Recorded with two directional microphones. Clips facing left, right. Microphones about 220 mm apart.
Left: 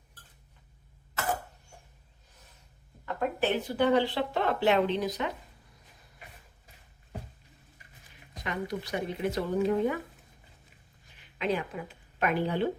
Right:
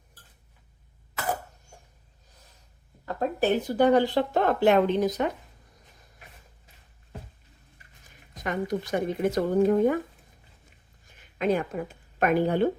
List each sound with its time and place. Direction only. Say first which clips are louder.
3.2 s speech: right 4 dB; 40° right (ahead or behind)
8.0 s speech: right 5 dB; 45° right (ahead or behind)
11.0 s speech: right 5 dB; 45° right (ahead or behind)